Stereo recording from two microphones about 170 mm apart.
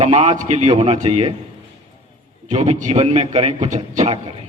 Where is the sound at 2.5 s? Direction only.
45° right (ahead or behind).